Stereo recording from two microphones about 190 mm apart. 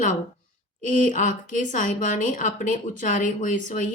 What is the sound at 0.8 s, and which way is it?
Speech, 45° left (ahead or behind).